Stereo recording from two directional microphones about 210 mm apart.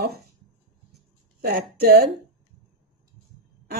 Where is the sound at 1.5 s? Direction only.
50° right (ahead or behind).